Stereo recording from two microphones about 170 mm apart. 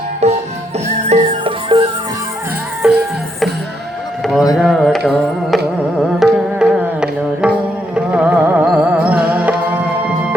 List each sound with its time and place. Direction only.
0.2 s music: 40° right (ahead or behind)
2.8 s music: 5° right (ahead or behind)
4.2 s a sound: centre (ahead or behind)
4.5 s music: centre (ahead or behind)